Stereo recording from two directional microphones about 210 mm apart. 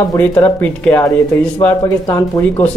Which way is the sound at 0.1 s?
15° left (ahead or behind).